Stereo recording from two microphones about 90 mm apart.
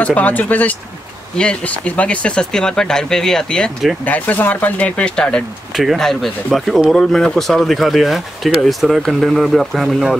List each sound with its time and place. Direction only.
0.0 s speech: 15° left (ahead or behind)
4.0 s speech: 20° left (ahead or behind); by 10.1 s centre (ahead or behind)